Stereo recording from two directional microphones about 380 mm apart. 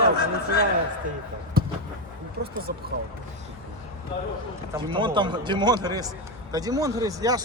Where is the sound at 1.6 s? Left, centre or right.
Right.